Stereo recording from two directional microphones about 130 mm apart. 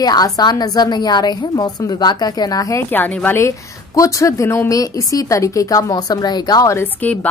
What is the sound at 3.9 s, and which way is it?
A woman's voice, 25° left (ahead or behind).